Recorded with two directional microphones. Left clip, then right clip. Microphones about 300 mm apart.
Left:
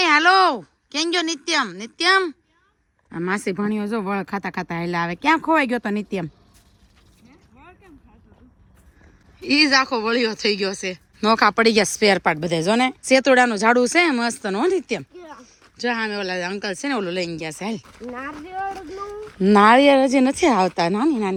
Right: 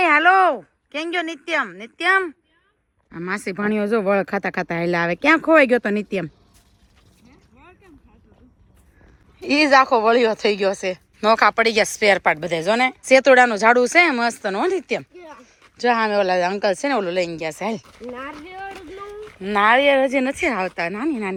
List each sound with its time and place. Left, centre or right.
0.0 s speech: centre
7.2 s a sound: centre
9.4 s speech: centre
19.5 s speech: centre